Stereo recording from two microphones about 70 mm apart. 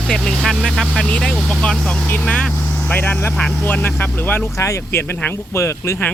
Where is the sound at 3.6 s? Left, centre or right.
Left.